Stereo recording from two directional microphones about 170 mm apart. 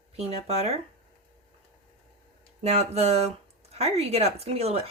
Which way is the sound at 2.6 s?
40° right (ahead or behind).